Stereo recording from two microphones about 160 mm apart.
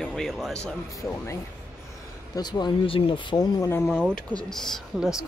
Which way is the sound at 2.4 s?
25° left (ahead or behind).